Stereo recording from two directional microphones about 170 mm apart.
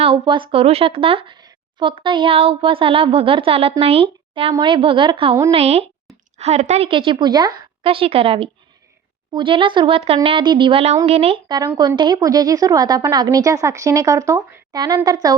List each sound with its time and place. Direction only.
0.0 s a woman's voice: 30° right (ahead or behind)
11.4 s a woman's voice: 25° right (ahead or behind)